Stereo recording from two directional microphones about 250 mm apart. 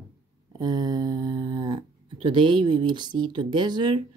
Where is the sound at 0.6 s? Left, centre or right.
Centre.